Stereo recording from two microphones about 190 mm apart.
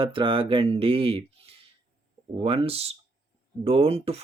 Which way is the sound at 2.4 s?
30° right (ahead or behind).